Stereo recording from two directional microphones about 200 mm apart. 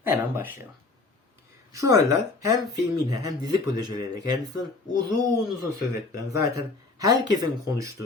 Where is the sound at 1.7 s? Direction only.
15° right (ahead or behind).